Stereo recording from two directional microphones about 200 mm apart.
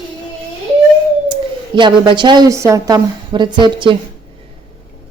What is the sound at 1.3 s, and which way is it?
Speech, 25° right (ahead or behind).